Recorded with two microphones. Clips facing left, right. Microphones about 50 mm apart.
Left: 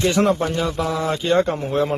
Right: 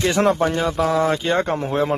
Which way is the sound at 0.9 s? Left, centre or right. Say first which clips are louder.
Even; right.